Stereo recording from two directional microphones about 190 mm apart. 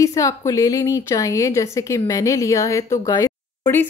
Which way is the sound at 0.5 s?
20° left (ahead or behind).